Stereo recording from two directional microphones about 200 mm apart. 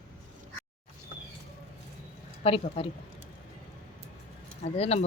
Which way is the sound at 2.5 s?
25° left (ahead or behind).